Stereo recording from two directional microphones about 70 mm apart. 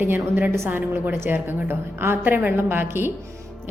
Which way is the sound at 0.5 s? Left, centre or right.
Right.